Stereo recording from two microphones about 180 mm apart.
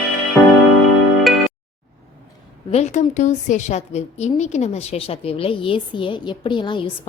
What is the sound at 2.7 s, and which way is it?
A woman's voice, 40° left (ahead or behind).